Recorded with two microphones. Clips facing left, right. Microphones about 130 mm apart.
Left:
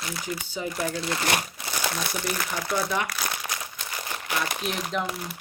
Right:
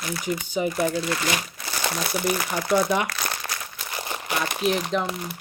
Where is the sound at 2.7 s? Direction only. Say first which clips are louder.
Right 6 dB; 15° right (ahead or behind).